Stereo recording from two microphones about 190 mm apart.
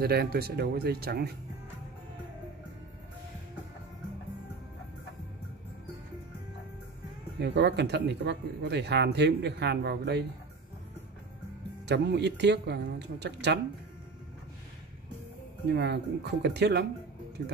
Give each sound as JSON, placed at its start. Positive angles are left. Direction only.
{"t": 0.0, "sound": "speech", "side_deg": -55}
{"t": 7.3, "sound": "speech", "side_deg": -60}
{"t": 11.8, "sound": "speech", "side_deg": -60}
{"t": 15.7, "sound": "speech", "side_deg": -60}